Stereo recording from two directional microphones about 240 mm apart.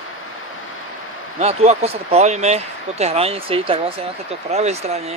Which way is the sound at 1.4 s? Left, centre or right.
Right.